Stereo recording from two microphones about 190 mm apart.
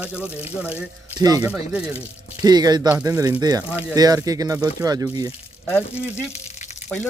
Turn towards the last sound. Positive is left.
turn(degrees=10)  # may be behind; listen again after turning